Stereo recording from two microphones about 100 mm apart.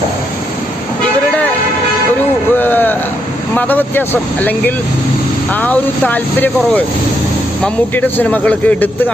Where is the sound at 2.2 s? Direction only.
20° left (ahead or behind).